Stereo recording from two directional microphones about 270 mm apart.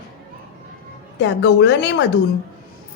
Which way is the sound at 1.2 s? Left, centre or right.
Left.